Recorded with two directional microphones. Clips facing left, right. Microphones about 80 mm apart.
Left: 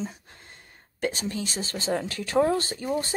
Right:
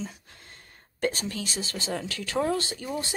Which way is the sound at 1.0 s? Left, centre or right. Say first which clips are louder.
Even; centre.